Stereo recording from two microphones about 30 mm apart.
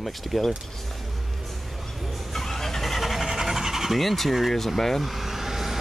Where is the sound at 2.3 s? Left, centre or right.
Centre.